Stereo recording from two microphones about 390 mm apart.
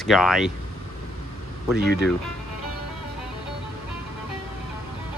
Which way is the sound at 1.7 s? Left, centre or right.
Right.